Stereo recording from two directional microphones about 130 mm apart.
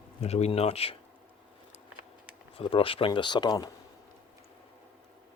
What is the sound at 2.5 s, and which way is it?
Speech, 45° left (ahead or behind).